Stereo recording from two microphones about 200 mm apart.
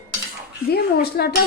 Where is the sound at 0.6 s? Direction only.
50° left (ahead or behind).